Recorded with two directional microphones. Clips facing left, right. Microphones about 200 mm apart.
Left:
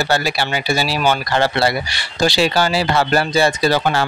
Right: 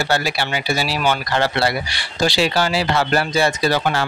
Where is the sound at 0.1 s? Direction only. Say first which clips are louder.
Left 2 dB; 35° left (ahead or behind).